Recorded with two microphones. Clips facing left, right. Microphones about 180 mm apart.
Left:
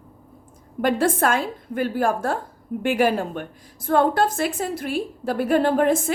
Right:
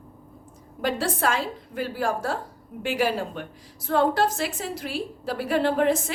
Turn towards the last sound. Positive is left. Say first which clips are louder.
# left 3 dB
turn(degrees=50)  # may be behind; listen again after turning